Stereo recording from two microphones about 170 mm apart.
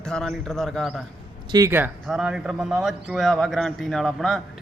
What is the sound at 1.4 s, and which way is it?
Speech, 25° right (ahead or behind).